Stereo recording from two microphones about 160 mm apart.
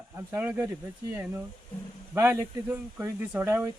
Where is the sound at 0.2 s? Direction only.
10° right (ahead or behind).